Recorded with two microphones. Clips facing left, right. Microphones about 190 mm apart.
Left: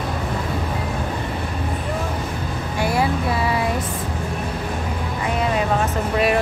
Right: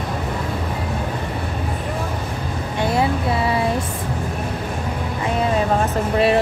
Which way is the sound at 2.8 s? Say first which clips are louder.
Right 1 dB; 25° right (ahead or behind).